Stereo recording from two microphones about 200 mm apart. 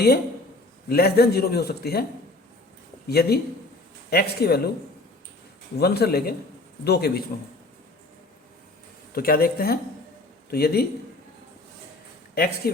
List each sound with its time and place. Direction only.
0.9 s a man's voice: 50° left (ahead or behind)
3.1 s a man's voice: 55° left (ahead or behind)
5.8 s a man's voice: 50° left (ahead or behind)
7.3 s a man's voice: 45° left (ahead or behind)
9.1 s a man's voice: 45° left (ahead or behind)
12.3 s a man's voice: 50° left (ahead or behind)